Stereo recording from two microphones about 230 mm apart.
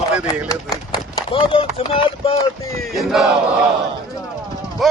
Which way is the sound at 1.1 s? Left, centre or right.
Left.